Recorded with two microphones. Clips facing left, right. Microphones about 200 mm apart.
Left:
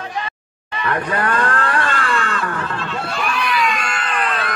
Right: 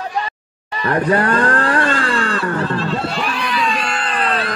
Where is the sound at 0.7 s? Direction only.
35° right (ahead or behind).